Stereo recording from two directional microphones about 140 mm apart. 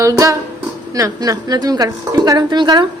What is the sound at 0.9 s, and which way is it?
A woman's voice, 25° right (ahead or behind).